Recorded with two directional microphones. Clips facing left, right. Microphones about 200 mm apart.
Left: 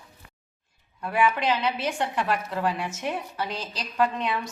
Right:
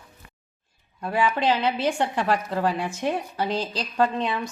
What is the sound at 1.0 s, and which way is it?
A woman's voice, 30° right (ahead or behind).